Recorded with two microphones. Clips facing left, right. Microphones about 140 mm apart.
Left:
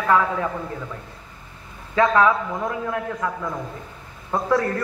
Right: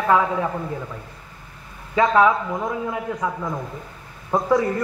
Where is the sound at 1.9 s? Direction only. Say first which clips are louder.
Right 1 dB; 15° right (ahead or behind).